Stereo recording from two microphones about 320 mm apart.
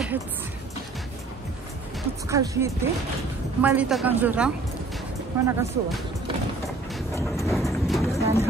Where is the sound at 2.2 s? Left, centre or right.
Centre.